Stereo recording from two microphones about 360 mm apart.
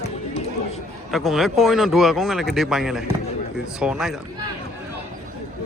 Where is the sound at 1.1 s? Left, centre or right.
Centre.